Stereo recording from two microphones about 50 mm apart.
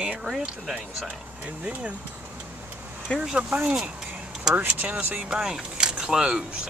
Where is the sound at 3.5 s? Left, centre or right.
Right.